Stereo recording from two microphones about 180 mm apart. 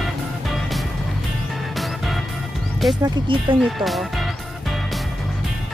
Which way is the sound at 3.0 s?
25° right (ahead or behind).